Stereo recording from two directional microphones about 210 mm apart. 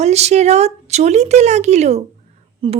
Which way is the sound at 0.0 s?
30° right (ahead or behind).